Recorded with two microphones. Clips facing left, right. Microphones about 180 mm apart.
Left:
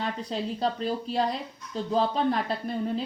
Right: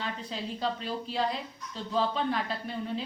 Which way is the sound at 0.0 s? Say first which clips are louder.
Left 5 dB; 40° left (ahead or behind).